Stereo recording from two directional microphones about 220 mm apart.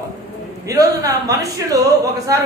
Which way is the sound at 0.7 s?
15° right (ahead or behind).